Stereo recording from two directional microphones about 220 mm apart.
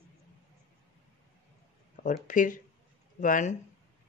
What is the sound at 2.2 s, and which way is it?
A woman's voice, 35° left (ahead or behind).